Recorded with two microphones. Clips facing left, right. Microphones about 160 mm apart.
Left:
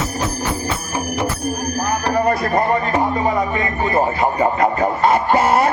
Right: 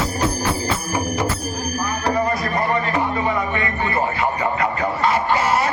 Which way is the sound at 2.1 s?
55° left (ahead or behind).